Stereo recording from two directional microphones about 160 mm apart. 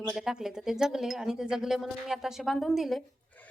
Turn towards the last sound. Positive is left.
turn(degrees=0)  # may be behind; listen again after turning